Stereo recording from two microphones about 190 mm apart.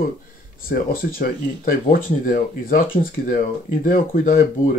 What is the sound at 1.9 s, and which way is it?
Speech, 45° left (ahead or behind).